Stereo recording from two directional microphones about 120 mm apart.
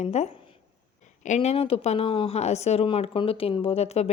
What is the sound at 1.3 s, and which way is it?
A woman's voice, 65° left (ahead or behind).